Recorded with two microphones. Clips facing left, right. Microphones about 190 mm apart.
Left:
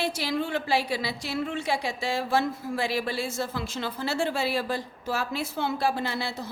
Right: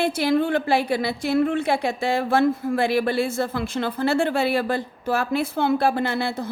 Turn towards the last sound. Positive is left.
turn(degrees=-55)  # may be behind; listen again after turning